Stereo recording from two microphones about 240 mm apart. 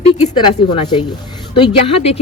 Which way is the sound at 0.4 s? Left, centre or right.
Centre.